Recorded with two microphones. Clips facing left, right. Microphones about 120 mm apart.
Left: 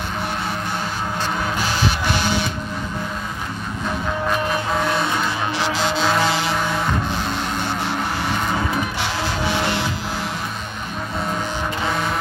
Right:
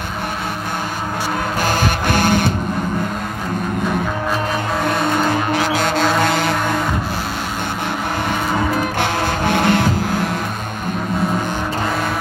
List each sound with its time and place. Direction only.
1.6 s music: 50° right (ahead or behind)
4.8 s music: 50° right (ahead or behind)
6.2 s a sound: 55° right (ahead or behind)
9.0 s music: 50° right (ahead or behind)